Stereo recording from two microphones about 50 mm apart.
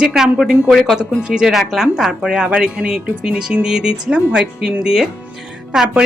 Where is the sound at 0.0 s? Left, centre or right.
Centre.